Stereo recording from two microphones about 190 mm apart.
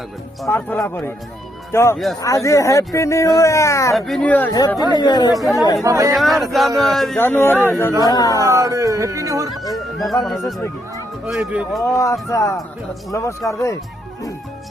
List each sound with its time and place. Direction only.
0.4 s speech: 15° left (ahead or behind)
3.9 s speech: centre (ahead or behind)
4.5 s speech: 20° left (ahead or behind)
5.8 s speech: 15° right (ahead or behind)
6.1 s speech: centre (ahead or behind); by 8.4 s 20° left (ahead or behind)
8.4 s speech: 15° right (ahead or behind)
9.6 s speech: centre (ahead or behind)
10.4 s speech: 15° left (ahead or behind)
11.3 s speech: centre (ahead or behind)
11.8 s speech: 15° left (ahead or behind)